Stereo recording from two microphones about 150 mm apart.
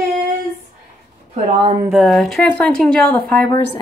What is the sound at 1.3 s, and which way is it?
Speech, 40° right (ahead or behind).